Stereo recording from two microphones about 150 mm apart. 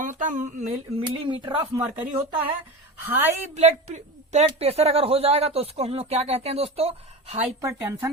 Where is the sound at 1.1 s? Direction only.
30° right (ahead or behind).